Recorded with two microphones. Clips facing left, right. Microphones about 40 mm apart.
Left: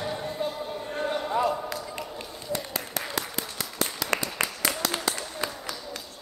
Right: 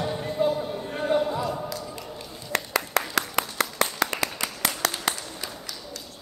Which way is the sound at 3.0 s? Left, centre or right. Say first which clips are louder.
Right 8 dB; right.